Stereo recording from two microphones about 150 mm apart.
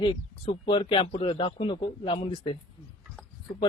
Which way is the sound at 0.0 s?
35° left (ahead or behind).